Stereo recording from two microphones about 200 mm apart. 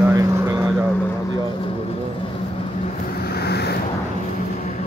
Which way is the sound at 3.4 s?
55° left (ahead or behind).